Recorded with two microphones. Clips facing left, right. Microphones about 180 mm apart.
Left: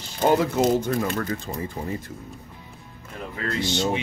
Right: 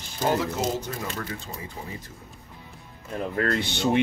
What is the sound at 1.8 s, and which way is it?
Speech, 45° left (ahead or behind).